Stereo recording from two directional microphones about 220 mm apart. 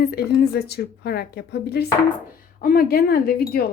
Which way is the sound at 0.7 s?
45° left (ahead or behind).